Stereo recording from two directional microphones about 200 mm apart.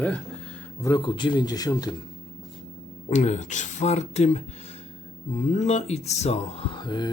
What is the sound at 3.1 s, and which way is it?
Speech, 35° left (ahead or behind).